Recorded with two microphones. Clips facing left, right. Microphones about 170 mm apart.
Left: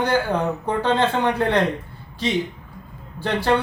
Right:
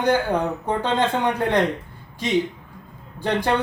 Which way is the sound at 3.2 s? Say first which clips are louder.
Right 1 dB; 15° right (ahead or behind).